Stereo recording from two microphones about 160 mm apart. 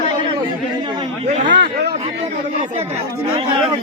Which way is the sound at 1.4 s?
90° right.